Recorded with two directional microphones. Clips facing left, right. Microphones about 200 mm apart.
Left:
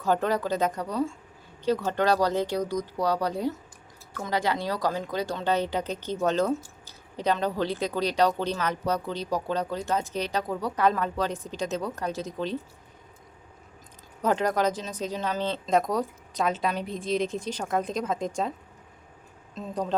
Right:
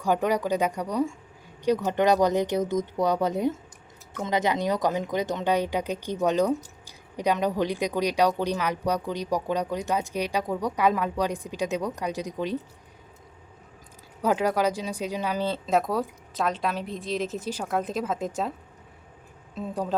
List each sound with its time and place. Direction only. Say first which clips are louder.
0.0 s speech: right 1 dB; 15° right (ahead or behind)
14.2 s speech: right 1 dB; 10° right (ahead or behind)
19.5 s speech: even; 10° right (ahead or behind)